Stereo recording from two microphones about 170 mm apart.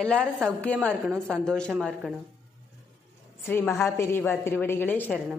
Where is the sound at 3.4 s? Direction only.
15° left (ahead or behind).